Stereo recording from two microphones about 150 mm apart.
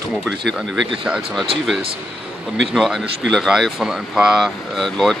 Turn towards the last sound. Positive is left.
turn(degrees=5)  # may be behind; listen again after turning